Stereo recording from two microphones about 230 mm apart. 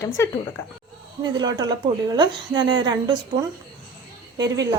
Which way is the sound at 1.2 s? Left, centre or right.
Centre.